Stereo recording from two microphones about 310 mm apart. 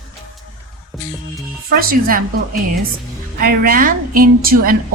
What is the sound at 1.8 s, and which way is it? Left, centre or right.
Speech, right.